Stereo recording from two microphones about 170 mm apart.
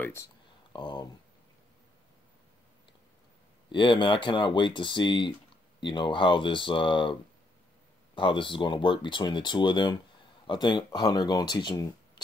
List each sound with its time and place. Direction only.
0.0 s speech: 15° left (ahead or behind)
0.7 s speech: 25° left (ahead or behind)
3.7 s speech: 30° left (ahead or behind)